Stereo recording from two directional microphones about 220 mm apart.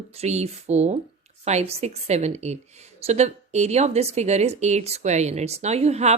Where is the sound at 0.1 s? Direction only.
30° right (ahead or behind).